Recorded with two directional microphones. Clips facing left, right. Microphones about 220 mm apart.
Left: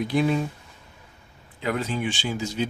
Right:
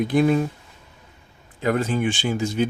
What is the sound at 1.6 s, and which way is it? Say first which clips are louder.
Speech: right 5 dB; 50° right (ahead or behind).